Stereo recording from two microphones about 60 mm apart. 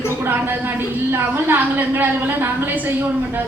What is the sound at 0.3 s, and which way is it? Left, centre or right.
A woman's voice, right.